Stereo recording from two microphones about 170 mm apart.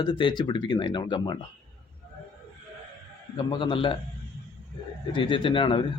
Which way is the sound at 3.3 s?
30° left (ahead or behind).